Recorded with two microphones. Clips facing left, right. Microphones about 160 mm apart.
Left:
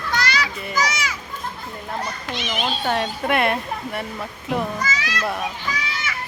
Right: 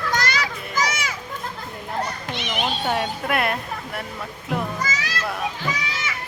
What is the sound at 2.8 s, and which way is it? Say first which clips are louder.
Speech: left 1 dB; 5° right (ahead or behind).